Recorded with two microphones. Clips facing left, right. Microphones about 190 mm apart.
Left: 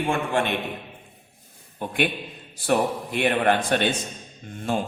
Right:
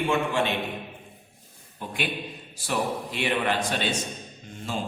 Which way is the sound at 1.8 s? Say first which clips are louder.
Left 6 dB; 55° left (ahead or behind).